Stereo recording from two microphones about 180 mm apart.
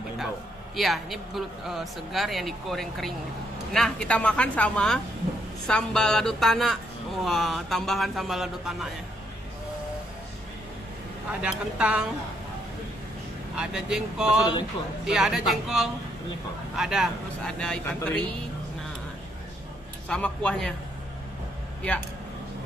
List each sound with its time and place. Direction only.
0.7 s speech: centre (ahead or behind)
11.4 s a woman's voice: 5° right (ahead or behind)
13.6 s speech: 5° right (ahead or behind)
14.4 s speech: 25° left (ahead or behind)
15.0 s speech: 5° right (ahead or behind)
20.1 s speech: 5° left (ahead or behind)